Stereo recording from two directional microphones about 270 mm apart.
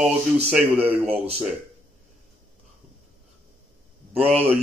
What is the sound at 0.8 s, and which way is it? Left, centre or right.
Speech, right.